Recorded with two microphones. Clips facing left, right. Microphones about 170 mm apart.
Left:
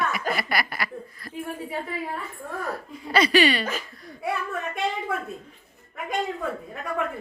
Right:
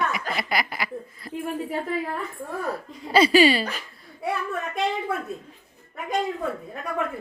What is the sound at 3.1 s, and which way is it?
Speech, 30° right (ahead or behind).